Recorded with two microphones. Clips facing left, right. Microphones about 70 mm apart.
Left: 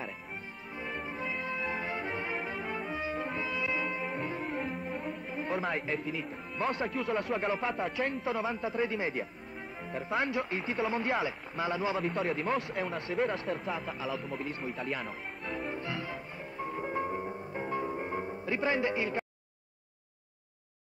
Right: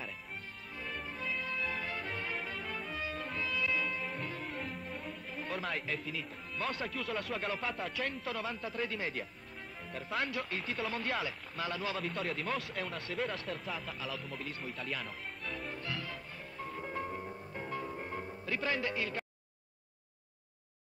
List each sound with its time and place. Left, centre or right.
0.7 s music: left
9.9 s a man's voice: centre
12.0 s speech: centre
15.7 s music: left